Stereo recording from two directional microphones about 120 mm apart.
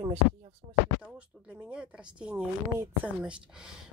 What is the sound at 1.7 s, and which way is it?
Speech, 10° right (ahead or behind).